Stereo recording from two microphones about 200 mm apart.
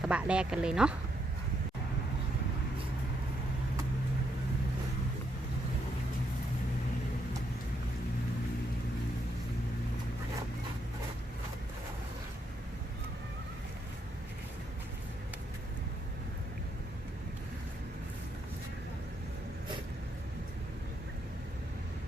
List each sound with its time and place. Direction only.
0.0 s speech: 5° right (ahead or behind)